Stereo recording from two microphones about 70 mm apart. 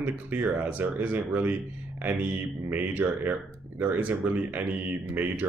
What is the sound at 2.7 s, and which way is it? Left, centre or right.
Speech, right.